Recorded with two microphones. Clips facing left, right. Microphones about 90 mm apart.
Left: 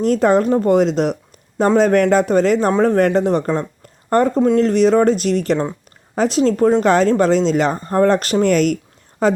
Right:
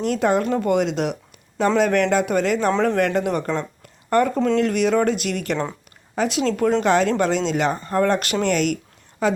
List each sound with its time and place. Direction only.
0.0 s speech: 40° left (ahead or behind)